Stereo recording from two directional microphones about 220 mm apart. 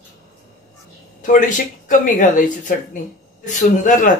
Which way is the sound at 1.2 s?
35° left (ahead or behind).